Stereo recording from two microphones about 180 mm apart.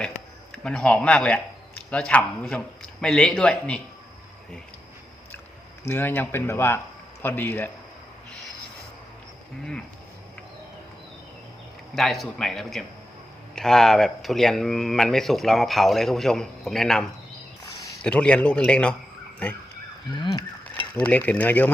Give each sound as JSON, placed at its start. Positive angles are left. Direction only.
{"t": 0.5, "sound": "speech", "side_deg": 5}
{"t": 5.9, "sound": "speech", "side_deg": 10}
{"t": 11.9, "sound": "speech", "side_deg": 0}
{"t": 20.1, "sound": "speech", "side_deg": 25}
{"t": 20.9, "sound": "speech", "side_deg": 10}